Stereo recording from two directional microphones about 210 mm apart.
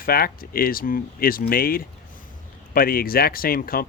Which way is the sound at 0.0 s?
45° left (ahead or behind).